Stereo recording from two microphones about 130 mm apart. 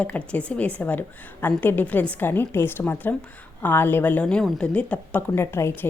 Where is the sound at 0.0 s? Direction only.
10° left (ahead or behind).